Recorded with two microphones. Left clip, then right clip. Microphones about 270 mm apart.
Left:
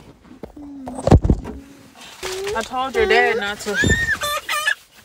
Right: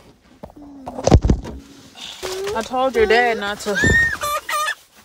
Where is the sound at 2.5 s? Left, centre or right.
Centre.